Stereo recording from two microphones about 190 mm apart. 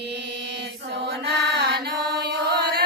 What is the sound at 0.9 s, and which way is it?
Chant, 60° right (ahead or behind).